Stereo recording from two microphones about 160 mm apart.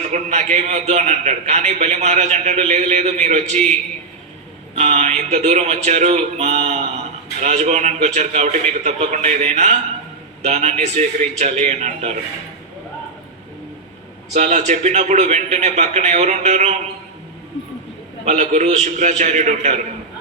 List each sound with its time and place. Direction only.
0.1 s a man's voice: 45° right (ahead or behind)
4.8 s a man's voice: 45° right (ahead or behind)
14.3 s a man's voice: 45° right (ahead or behind)
18.3 s a man's voice: 45° right (ahead or behind)